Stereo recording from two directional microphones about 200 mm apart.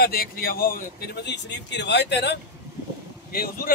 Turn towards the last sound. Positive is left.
turn(degrees=50)  # may be behind; listen again after turning